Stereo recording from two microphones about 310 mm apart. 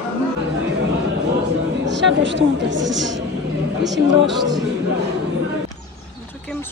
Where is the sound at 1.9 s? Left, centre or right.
Right.